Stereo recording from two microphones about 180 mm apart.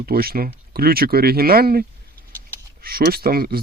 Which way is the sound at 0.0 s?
55° right (ahead or behind).